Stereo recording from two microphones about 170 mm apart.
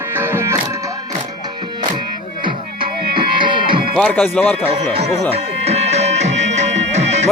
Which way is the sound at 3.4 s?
30° right (ahead or behind).